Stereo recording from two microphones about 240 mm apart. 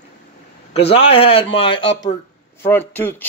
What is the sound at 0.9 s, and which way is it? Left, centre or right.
Speech, left.